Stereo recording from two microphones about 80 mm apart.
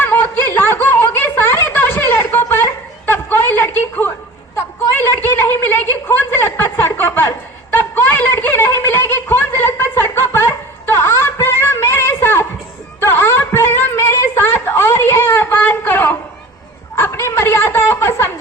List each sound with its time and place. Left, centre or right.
0.0 s snicker: left
3.1 s a sound: left
16.9 s chuckle: left